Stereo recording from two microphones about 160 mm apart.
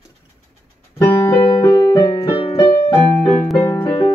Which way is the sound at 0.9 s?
20° left (ahead or behind).